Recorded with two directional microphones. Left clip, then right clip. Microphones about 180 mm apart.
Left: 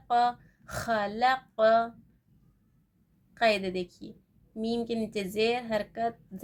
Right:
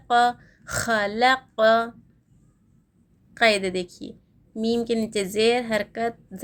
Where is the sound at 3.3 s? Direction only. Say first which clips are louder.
Right 6 dB; 25° right (ahead or behind).